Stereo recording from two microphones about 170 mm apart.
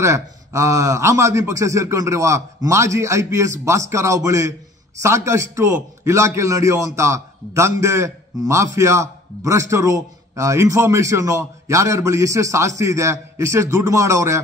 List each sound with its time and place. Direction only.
0.0 s a man's voice: 15° right (ahead or behind)